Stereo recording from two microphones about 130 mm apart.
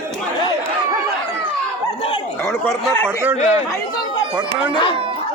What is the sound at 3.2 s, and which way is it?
Speech, 15° right (ahead or behind).